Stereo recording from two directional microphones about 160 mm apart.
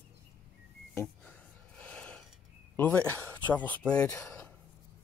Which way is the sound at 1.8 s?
5° left (ahead or behind).